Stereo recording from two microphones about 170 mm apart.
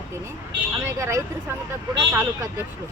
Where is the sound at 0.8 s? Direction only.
15° right (ahead or behind).